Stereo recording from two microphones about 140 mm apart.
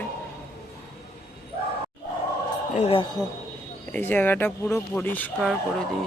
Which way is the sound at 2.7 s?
55° left (ahead or behind).